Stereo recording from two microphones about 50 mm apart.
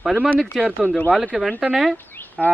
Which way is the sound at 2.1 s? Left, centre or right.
Left.